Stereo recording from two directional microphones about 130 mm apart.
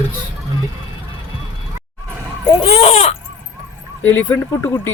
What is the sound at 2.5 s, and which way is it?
Speech, 50° left (ahead or behind).